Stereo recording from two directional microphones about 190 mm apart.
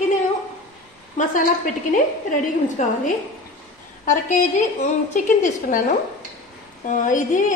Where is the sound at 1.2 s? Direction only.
40° left (ahead or behind).